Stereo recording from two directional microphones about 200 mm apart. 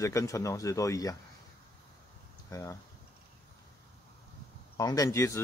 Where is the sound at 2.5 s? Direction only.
15° left (ahead or behind).